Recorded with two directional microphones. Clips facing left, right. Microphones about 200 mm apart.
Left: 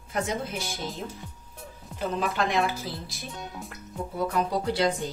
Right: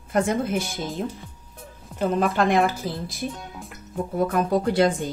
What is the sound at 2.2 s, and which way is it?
Speech, 50° right (ahead or behind).